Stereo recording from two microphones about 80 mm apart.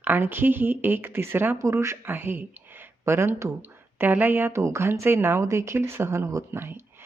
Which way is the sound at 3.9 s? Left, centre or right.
Right.